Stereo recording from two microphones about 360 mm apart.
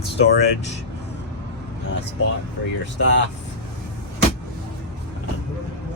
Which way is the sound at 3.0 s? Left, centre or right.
Left.